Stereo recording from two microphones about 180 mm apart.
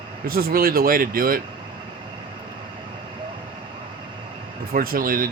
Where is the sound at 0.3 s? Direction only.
55° right (ahead or behind).